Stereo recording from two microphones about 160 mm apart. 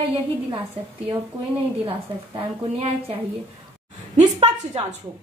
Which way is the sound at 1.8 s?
35° right (ahead or behind).